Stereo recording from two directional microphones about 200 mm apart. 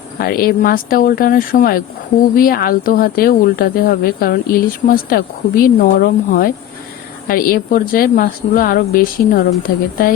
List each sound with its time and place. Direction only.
0.2 s speech: 45° left (ahead or behind)